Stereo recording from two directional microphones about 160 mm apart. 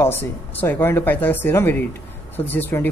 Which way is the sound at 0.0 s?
15° left (ahead or behind).